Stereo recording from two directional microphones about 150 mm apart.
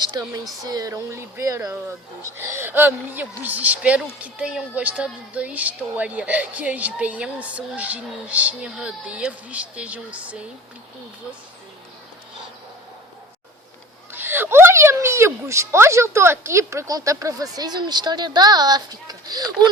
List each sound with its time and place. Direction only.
0.0 s a woman's voice: 30° right (ahead or behind); by 10.4 s 10° right (ahead or behind)
14.1 s a woman's voice: 15° right (ahead or behind)